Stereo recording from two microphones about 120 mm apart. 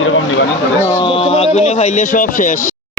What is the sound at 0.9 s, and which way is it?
Speech, 45° left (ahead or behind).